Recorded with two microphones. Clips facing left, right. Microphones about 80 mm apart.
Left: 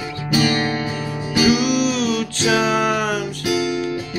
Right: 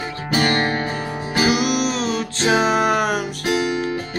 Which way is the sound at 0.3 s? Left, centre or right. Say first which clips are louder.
Even; right.